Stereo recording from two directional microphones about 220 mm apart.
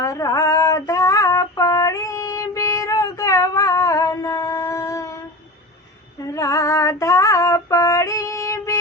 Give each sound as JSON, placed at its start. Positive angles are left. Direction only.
{"t": 0.0, "sound": "music", "side_deg": 15}
{"t": 6.3, "sound": "female singing", "side_deg": 15}